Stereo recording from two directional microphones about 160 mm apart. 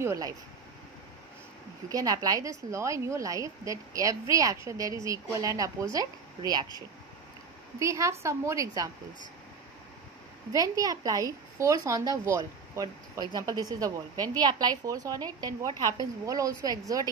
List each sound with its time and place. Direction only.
0.0 s a woman's voice: 20° right (ahead or behind)
1.9 s a woman's voice: 25° right (ahead or behind)
7.8 s a woman's voice: 20° right (ahead or behind)
10.5 s a woman's voice: 20° right (ahead or behind)